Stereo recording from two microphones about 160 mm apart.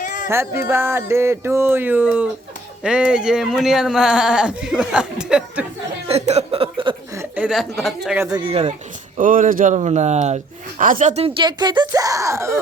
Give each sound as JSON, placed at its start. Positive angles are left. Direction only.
{"t": 0.0, "sound": "a sound", "side_deg": 55}
{"t": 0.3, "sound": "a sound", "side_deg": -15}
{"t": 2.8, "sound": "speech", "side_deg": -5}
{"t": 6.1, "sound": "music", "side_deg": -40}
{"t": 7.2, "sound": "a woman's voice", "side_deg": -10}
{"t": 8.2, "sound": "speech", "side_deg": -25}
{"t": 9.1, "sound": "speech", "side_deg": -55}
{"t": 11.4, "sound": "speech", "side_deg": -25}